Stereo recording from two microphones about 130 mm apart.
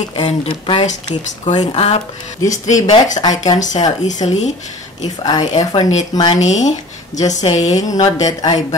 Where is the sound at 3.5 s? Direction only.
70° left (ahead or behind).